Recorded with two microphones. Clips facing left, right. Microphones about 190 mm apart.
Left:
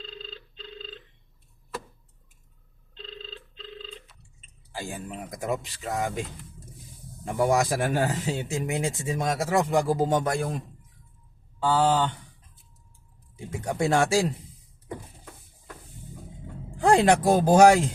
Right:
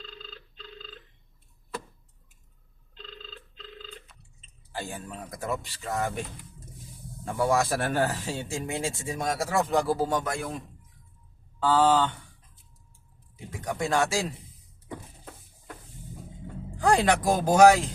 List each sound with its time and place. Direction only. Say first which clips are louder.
0.0 s a sound: left 4 dB; 30° left (ahead or behind)
3.5 s telephone bell ringing: left 4 dB; 30° left (ahead or behind)
4.7 s speech: left 1 dB; 10° left (ahead or behind)
7.3 s speech: left 2 dB; 20° left (ahead or behind)
11.6 s speech: right 1 dB; 10° left (ahead or behind)
13.3 s speech: left 3 dB; 25° left (ahead or behind)
16.8 s speech: left 3 dB; 25° left (ahead or behind)